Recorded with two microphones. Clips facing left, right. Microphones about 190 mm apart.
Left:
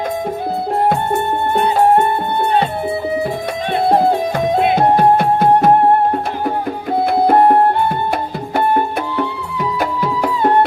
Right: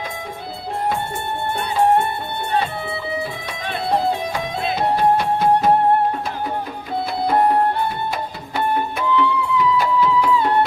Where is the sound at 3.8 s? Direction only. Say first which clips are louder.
Left 6 dB; 50° left (ahead or behind).